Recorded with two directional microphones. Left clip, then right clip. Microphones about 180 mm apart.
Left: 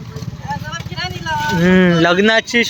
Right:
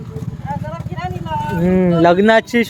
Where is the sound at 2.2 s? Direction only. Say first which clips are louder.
Right 1 dB; 25° right (ahead or behind).